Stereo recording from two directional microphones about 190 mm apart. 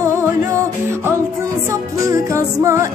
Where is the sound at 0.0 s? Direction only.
15° right (ahead or behind).